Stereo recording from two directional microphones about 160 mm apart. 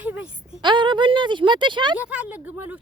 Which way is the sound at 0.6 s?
30° right (ahead or behind).